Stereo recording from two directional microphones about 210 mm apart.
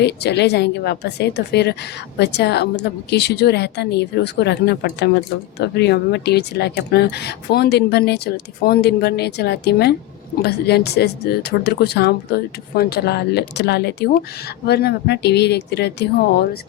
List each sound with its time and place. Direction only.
0.0 s a woman's voice: 55° left (ahead or behind)